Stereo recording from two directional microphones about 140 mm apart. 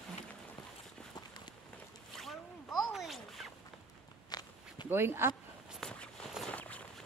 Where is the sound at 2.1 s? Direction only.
Centre (ahead or behind).